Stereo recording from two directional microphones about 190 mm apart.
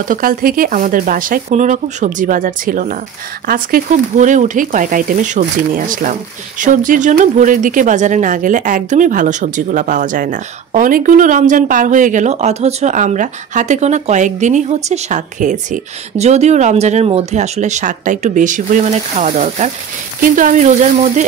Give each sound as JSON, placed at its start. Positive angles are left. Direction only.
{"t": 0.1, "sound": "speech", "side_deg": -50}